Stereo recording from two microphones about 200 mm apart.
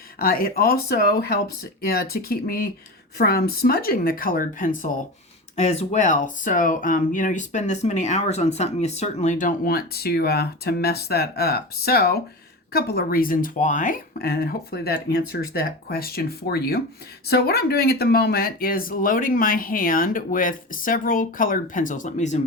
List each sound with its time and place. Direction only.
0.2 s speech: 50° left (ahead or behind)